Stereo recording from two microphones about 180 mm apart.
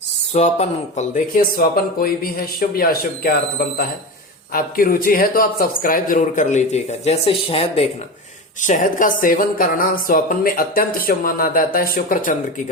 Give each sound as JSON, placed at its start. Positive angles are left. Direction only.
{"t": 0.3, "sound": "speech", "side_deg": 40}
{"t": 8.6, "sound": "speech", "side_deg": 45}